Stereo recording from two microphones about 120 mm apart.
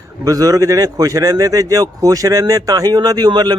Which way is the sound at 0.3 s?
30° right (ahead or behind).